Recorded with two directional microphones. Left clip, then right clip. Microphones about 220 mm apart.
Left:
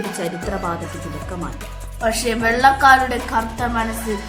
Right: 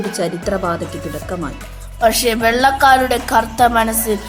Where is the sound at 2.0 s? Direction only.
35° right (ahead or behind).